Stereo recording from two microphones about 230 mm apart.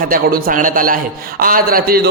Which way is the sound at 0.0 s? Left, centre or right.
Right.